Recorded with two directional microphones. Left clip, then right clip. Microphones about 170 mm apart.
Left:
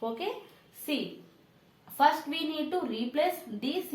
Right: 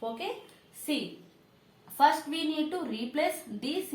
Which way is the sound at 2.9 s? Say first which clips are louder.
Left 3 dB; 35° left (ahead or behind).